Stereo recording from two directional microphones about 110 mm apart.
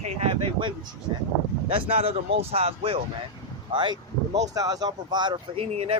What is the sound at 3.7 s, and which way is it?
Speech, 45° right (ahead or behind).